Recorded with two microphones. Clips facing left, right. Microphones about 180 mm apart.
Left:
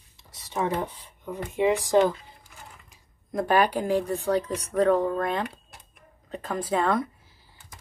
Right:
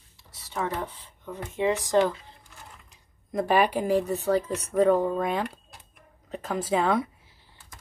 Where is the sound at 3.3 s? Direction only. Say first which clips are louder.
Even; centre (ahead or behind).